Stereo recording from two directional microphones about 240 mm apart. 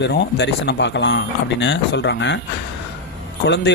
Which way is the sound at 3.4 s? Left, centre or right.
Left.